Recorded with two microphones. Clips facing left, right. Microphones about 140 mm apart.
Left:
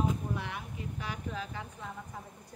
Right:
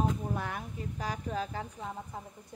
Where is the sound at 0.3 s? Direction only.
45° right (ahead or behind).